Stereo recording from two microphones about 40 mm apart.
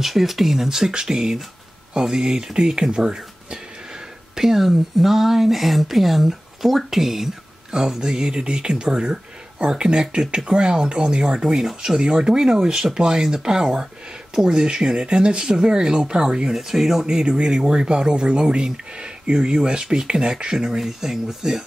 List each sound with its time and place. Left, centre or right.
0.0 s speech: centre
16.5 s speech: centre
17.0 s speech: centre